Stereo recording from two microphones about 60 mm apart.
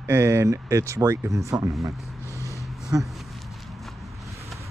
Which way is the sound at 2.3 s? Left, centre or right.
Left.